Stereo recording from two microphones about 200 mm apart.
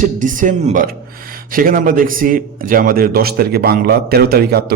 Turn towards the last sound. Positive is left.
turn(degrees=-50)  # may be behind; listen again after turning